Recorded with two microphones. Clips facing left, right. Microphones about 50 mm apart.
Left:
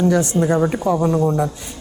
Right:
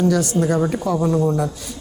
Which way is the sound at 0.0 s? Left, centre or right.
Left.